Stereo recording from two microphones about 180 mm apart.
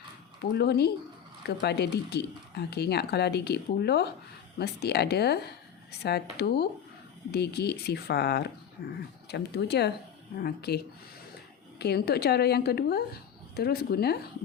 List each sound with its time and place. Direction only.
0.5 s speech: 65° left (ahead or behind)
11.8 s speech: 60° left (ahead or behind)